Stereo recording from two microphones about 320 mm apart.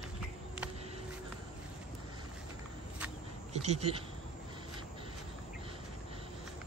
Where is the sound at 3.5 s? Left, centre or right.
Centre.